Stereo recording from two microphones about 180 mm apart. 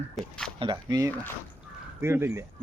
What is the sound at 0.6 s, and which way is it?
Speech, 25° right (ahead or behind).